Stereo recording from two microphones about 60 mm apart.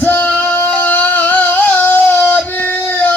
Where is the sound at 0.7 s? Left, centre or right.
Left.